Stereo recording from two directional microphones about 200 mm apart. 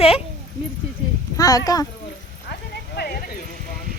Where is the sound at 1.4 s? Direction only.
20° left (ahead or behind).